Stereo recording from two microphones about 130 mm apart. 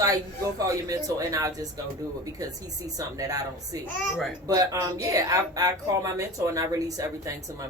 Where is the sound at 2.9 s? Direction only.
25° right (ahead or behind).